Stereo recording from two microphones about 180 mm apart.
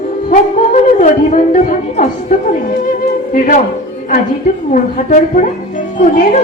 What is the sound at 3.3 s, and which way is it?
Speech, 45° left (ahead or behind).